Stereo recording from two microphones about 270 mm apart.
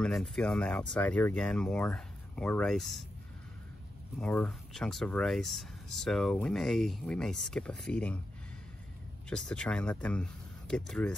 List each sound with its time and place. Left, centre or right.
0.0 s speech: centre
4.2 s speech: centre
9.3 s speech: centre